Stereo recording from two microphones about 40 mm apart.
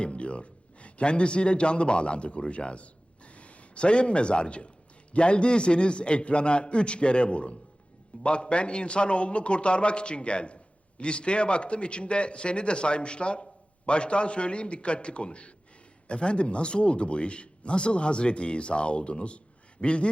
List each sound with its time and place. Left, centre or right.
0.0 s a man's voice: left